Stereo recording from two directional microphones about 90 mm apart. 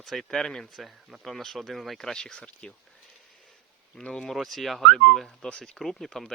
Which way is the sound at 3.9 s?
5° left (ahead or behind).